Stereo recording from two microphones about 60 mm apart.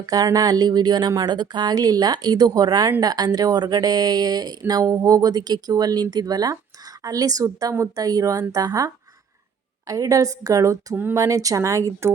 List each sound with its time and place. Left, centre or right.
0.0 s a woman's voice: right